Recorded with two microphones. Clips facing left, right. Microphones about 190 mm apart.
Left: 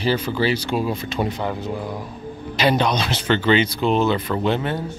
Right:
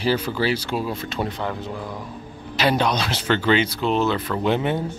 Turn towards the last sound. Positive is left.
turn(degrees=-15)  # may be behind; listen again after turning